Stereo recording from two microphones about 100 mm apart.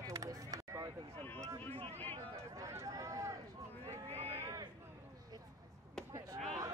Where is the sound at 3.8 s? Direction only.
90° right.